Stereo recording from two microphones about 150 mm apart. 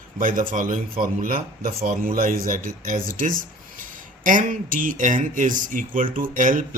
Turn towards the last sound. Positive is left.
turn(degrees=-60)  # may be behind; listen again after turning